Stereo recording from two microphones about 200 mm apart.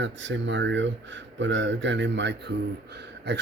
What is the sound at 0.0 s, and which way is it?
Speech, 65° right (ahead or behind).